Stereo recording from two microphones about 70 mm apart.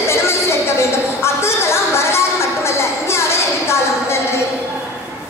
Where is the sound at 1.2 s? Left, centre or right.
Left.